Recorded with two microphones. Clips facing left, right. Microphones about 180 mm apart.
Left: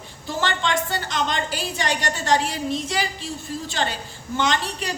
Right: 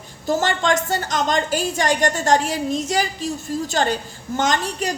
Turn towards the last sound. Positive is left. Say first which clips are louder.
# right 3 dB
turn(degrees=-45)  # may be behind; listen again after turning